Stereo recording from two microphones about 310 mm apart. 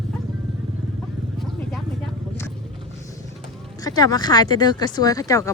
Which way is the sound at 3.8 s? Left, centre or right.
Centre.